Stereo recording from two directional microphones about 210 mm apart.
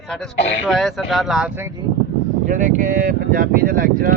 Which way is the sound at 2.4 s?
40° right (ahead or behind).